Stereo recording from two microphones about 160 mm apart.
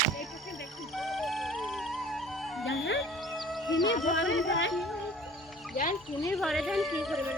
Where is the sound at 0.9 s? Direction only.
Centre (ahead or behind).